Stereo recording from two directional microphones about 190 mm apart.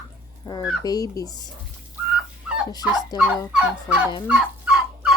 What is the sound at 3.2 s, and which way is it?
Fowl, 5° right (ahead or behind).